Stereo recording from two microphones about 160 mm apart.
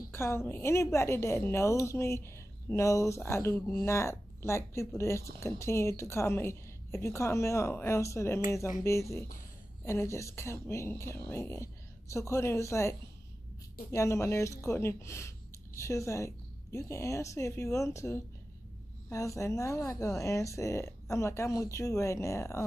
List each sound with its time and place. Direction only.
0.1 s a woman's voice: 15° left (ahead or behind)
13.9 s a woman's voice: 20° left (ahead or behind)